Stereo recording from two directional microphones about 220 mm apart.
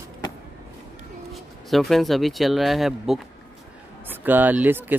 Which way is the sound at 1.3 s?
Centre (ahead or behind).